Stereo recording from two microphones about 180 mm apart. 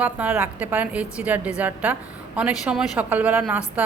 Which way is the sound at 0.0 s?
10° right (ahead or behind).